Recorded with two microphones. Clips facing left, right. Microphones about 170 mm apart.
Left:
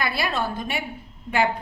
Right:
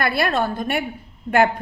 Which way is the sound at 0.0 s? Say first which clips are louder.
Right 5 dB; 55° right (ahead or behind).